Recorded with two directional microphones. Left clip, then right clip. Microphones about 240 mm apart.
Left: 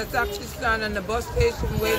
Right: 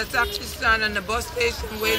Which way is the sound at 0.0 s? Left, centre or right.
Centre.